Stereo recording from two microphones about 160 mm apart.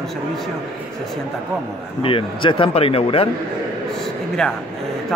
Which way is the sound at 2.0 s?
35° left (ahead or behind).